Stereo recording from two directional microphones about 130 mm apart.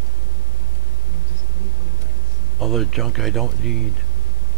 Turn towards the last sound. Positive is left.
turn(degrees=0)  # may be behind; listen again after turning